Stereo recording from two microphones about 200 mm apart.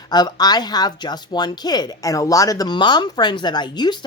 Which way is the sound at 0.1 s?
20° left (ahead or behind).